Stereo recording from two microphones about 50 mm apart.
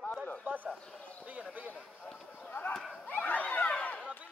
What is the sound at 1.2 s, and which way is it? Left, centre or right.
Speech, right.